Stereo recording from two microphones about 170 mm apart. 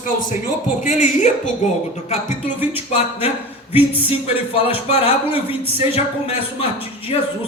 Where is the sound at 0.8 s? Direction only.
45° left (ahead or behind).